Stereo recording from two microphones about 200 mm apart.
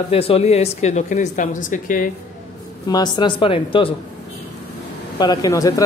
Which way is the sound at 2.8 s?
20° left (ahead or behind).